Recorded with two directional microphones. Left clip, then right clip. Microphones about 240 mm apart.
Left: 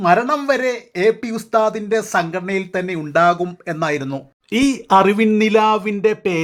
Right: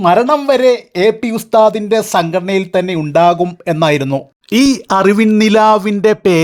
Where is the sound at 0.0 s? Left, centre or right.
Right.